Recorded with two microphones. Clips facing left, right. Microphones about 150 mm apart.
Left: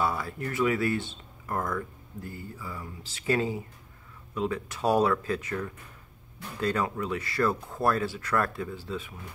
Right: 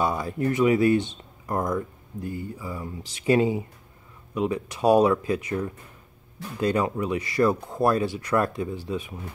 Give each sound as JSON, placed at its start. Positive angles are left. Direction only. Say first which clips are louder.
{"t": 0.0, "sound": "speech", "louder": "right 5 dB", "side_deg": -20}